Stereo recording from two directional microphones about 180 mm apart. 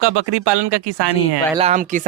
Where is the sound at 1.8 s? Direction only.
45° right (ahead or behind).